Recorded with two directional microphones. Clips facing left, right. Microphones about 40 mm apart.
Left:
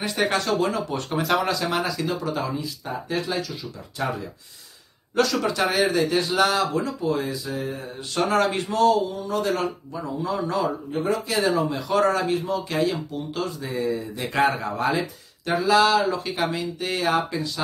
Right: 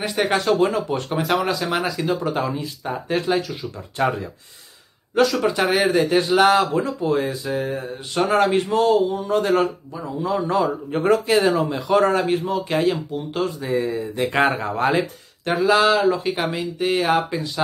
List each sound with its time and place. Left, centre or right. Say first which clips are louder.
0.0 s speech: right 2 dB; centre
0.5 s speech: right 5 dB; right
1.1 s speech: right 1 dB; centre; by 4.1 s right
5.1 s speech: right 4 dB; centre; by 7.7 s right
7.7 s speech: right 4 dB; right
10.9 s speech: right 6 dB; right
11.4 s speech: right 3 dB; centre
11.9 s speech: right 4 dB; right